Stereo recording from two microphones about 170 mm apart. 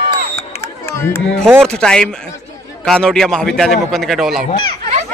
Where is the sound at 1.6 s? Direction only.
5° left (ahead or behind).